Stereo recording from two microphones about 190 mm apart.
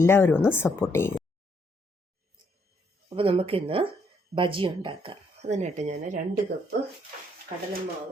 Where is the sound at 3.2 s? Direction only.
30° right (ahead or behind).